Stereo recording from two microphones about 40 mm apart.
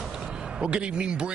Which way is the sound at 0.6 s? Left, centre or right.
Right.